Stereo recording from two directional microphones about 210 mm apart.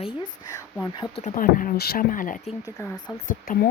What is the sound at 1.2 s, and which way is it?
Speech, 40° left (ahead or behind).